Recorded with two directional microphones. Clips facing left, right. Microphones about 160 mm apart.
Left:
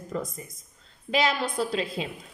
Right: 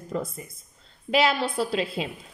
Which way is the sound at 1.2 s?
35° right (ahead or behind).